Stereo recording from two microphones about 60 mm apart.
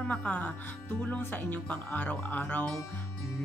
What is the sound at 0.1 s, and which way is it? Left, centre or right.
Music, left.